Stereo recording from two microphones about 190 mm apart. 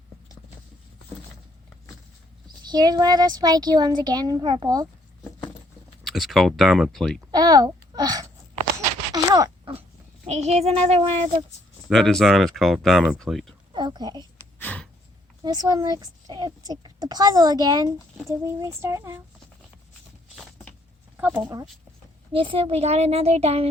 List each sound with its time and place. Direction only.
2.6 s a child's voice: 20° right (ahead or behind)
6.1 s speech: centre (ahead or behind)
7.3 s a sound: 20° right (ahead or behind)
10.3 s a woman's voice: 35° right (ahead or behind)
11.9 s speech: centre (ahead or behind)
13.7 s a woman's voice: 20° right (ahead or behind)
14.6 s gasp: 10° left (ahead or behind)
15.4 s a child's voice: 20° right (ahead or behind)
20.3 s vehicle: centre (ahead or behind)
21.2 s speech: 10° right (ahead or behind)
22.3 s a woman's voice: 30° right (ahead or behind)